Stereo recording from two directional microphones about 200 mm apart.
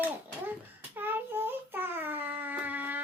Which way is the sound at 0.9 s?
10° right (ahead or behind).